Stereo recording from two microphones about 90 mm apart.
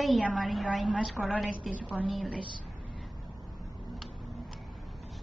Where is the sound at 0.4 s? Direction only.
Centre (ahead or behind).